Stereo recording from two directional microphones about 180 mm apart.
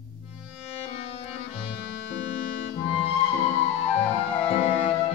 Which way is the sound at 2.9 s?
35° left (ahead or behind).